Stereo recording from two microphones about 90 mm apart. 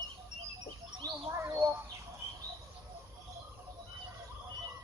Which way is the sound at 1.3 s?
30° right (ahead or behind).